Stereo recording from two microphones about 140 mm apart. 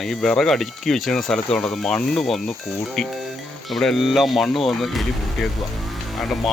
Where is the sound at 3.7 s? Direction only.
Centre (ahead or behind).